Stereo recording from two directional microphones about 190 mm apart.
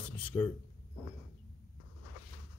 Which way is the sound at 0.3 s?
10° left (ahead or behind).